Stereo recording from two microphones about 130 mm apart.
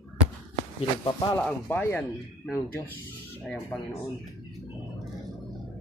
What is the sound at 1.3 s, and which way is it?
Speech, 15° left (ahead or behind).